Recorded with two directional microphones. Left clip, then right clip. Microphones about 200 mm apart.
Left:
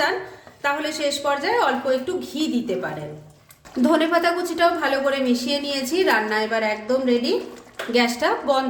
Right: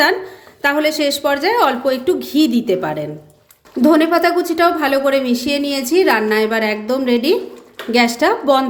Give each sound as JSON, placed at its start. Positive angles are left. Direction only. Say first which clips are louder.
{"t": 0.6, "sound": "a woman's voice", "louder": "right 8 dB", "side_deg": -45}
{"t": 3.8, "sound": "a woman's voice", "louder": "right 6 dB", "side_deg": -30}